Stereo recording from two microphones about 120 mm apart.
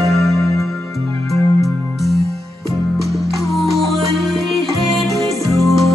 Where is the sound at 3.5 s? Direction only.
Centre (ahead or behind).